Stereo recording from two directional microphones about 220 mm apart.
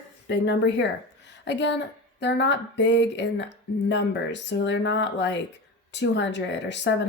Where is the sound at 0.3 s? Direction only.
50° left (ahead or behind).